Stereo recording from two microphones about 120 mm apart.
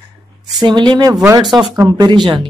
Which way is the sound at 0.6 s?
40° right (ahead or behind).